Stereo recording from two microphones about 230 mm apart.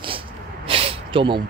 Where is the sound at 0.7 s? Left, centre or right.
Right.